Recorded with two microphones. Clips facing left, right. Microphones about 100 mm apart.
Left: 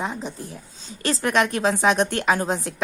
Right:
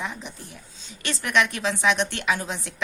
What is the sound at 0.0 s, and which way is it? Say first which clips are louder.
A woman's voice: left 5 dB; 35° left (ahead or behind).